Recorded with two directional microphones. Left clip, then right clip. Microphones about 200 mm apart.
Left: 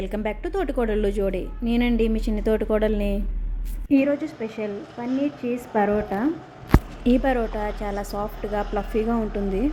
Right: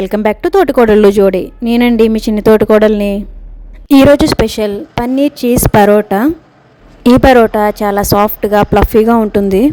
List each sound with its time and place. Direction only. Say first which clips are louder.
0.0 s speech: right 16 dB; 45° right (ahead or behind)
3.8 s speech: right 16 dB; 55° right (ahead or behind)
7.0 s speech: right 19 dB; 45° right (ahead or behind)